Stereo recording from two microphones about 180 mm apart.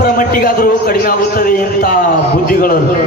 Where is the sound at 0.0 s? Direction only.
55° left (ahead or behind).